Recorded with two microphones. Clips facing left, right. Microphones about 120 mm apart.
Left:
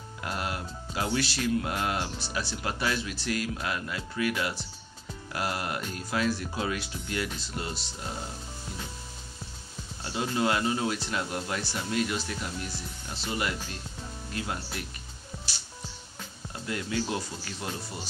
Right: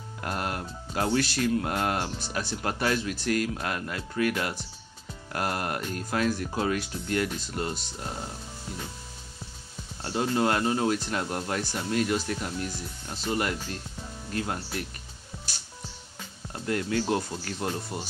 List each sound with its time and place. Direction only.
0.2 s speech: 45° right (ahead or behind)
10.0 s speech: 45° right (ahead or behind)
16.6 s speech: 50° right (ahead or behind)